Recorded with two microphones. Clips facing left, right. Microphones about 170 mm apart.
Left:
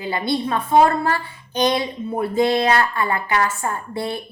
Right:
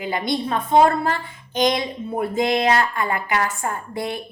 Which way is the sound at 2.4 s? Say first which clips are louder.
Left 2 dB; 20° right (ahead or behind).